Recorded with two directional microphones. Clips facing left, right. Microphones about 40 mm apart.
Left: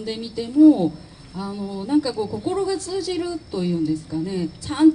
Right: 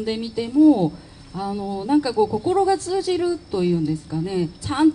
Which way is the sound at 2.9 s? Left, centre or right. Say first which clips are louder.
Right 4 dB; right.